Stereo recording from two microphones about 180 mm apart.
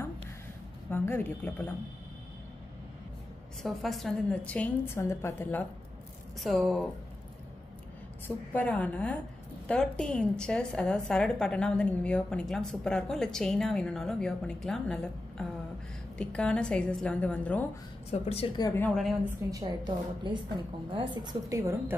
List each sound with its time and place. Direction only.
0.8 s speech: 10° left (ahead or behind)
3.6 s a woman's voice: centre (ahead or behind)
8.5 s a woman's voice: 10° left (ahead or behind)
18.1 s speech: 35° left (ahead or behind)
18.6 s a woman's voice: 15° left (ahead or behind)
19.2 s a woman's voice: 20° right (ahead or behind)